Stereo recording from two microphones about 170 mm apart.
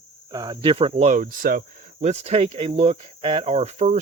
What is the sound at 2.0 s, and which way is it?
Speech, 40° right (ahead or behind).